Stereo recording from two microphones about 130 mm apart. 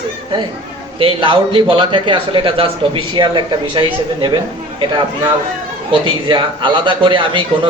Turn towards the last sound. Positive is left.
turn(degrees=-40)  # may be behind; listen again after turning